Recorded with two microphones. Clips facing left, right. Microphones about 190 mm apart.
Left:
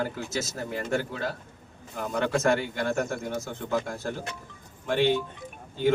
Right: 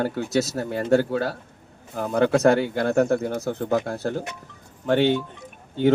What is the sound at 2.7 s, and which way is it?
Speech, 60° right (ahead or behind).